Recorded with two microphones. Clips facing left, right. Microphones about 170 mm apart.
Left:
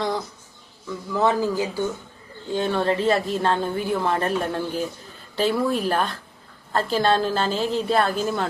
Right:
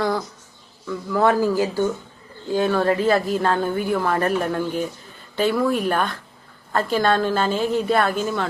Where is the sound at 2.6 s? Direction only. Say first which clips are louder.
Right 3 dB; 25° left (ahead or behind).